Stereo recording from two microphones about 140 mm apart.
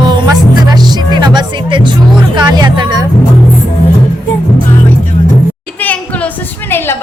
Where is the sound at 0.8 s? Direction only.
30° right (ahead or behind).